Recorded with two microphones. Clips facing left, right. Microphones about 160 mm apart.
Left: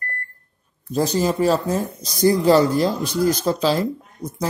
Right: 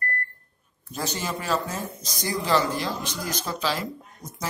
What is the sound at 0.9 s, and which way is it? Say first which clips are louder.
Speech: left 11 dB; 35° left (ahead or behind).